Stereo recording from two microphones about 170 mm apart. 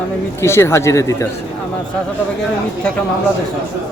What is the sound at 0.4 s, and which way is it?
Speech, 15° left (ahead or behind).